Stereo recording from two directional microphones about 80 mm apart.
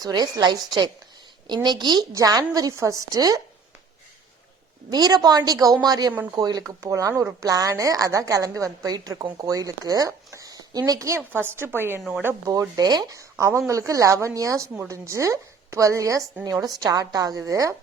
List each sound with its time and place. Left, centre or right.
0.0 s a woman's voice: right
2.1 s a woman's voice: right
4.9 s a woman's voice: right
11.2 s a woman's voice: right
12.5 s a woman's voice: right
13.3 s a woman's voice: right